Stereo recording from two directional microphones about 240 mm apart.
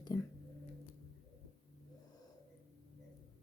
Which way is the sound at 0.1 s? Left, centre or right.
Centre.